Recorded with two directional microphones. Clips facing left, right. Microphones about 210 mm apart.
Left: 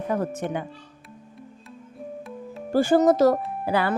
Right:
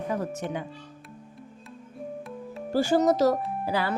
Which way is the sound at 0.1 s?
55° left (ahead or behind).